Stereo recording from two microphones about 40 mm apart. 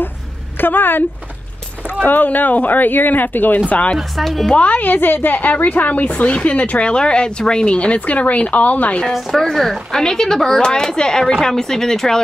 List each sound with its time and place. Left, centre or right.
0.6 s a woman's voice: left
2.0 s speech: left
4.2 s a woman's voice: centre
4.5 s speech: left
6.9 s speech: left
9.1 s a woman's voice: centre